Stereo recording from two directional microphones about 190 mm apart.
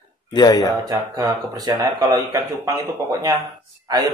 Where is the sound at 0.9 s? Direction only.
20° right (ahead or behind).